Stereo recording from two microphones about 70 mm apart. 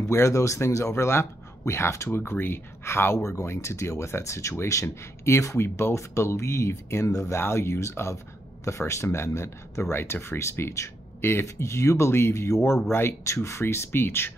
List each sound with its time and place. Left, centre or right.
0.1 s speech: left
7.1 s speech: left
7.3 s speech: left